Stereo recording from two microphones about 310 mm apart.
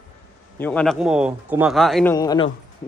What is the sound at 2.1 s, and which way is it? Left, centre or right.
Speech, centre.